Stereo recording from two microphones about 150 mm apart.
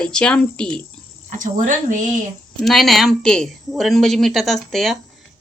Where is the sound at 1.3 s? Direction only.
55° right (ahead or behind).